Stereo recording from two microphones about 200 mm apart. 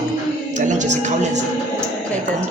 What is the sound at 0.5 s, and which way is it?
Speech, 35° right (ahead or behind).